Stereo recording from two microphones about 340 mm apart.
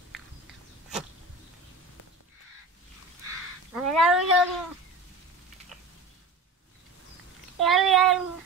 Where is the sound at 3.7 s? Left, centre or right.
Centre.